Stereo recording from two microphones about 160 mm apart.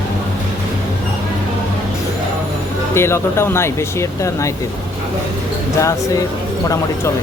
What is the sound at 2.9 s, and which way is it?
Speech, 15° left (ahead or behind).